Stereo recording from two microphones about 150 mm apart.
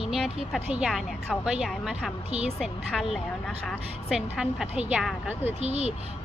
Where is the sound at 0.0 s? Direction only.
5° right (ahead or behind).